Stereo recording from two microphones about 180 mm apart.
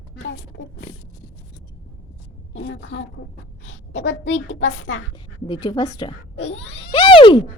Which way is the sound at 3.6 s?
85° left.